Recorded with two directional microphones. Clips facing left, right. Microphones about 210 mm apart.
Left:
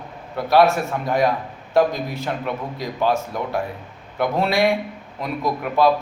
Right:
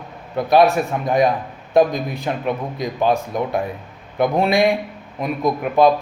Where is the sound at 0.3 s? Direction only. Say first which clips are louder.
Right 2 dB; 15° right (ahead or behind).